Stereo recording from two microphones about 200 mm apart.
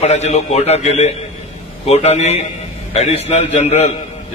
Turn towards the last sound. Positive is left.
turn(degrees=30)  # may be behind; listen again after turning